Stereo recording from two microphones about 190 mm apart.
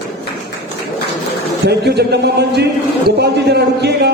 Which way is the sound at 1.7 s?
60° right (ahead or behind).